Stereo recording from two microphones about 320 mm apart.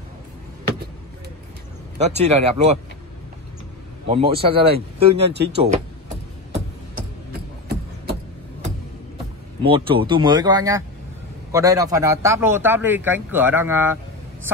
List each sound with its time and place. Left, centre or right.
2.0 s speech: centre
4.1 s a man's voice: centre
5.3 s speech: right
5.6 s a sound: right
9.6 s a man's voice: centre